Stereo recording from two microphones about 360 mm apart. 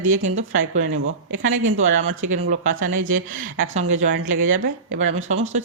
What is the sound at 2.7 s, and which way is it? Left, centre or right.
Speech, right.